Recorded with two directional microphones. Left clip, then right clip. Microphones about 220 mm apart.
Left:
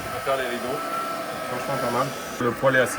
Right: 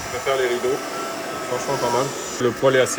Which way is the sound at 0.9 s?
45° right (ahead or behind).